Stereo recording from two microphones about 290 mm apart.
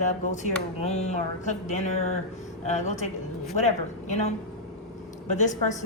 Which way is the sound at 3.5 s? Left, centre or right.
Left.